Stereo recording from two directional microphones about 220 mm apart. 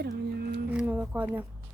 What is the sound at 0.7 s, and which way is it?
Speech, 5° right (ahead or behind).